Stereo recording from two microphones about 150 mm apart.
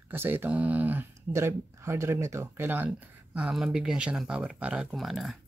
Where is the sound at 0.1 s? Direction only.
15° right (ahead or behind).